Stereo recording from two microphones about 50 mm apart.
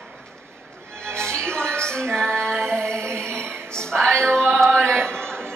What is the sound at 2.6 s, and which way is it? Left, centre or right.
Music, right.